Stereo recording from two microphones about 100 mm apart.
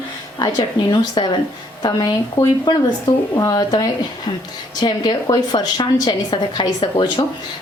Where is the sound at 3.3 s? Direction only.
40° left (ahead or behind).